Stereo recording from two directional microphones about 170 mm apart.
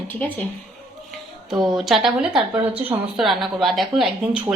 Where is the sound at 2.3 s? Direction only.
30° right (ahead or behind).